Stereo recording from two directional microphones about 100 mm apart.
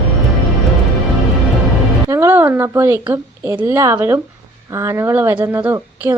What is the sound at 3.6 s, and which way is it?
A woman's voice, 25° right (ahead or behind).